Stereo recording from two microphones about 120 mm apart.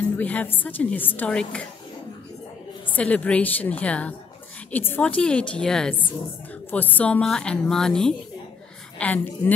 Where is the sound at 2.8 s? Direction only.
10° left (ahead or behind).